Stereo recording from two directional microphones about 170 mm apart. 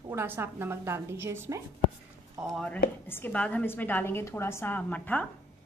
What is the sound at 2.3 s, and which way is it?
A woman's voice, centre (ahead or behind).